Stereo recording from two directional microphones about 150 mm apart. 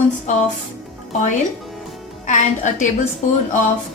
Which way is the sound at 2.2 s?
55° left (ahead or behind).